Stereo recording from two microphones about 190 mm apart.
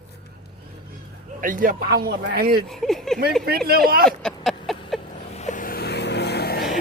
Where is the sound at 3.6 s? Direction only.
50° right (ahead or behind).